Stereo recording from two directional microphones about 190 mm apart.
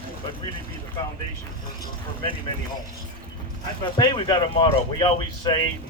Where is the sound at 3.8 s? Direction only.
25° left (ahead or behind).